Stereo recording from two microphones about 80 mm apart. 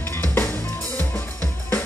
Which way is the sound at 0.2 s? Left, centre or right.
Centre.